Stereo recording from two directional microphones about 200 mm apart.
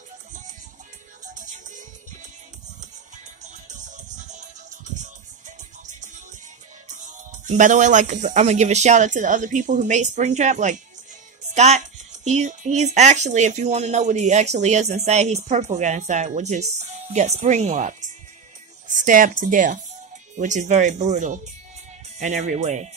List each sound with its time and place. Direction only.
1.2 s music: 40° right (ahead or behind)
3.4 s music: 35° right (ahead or behind)
6.9 s speech: 40° right (ahead or behind)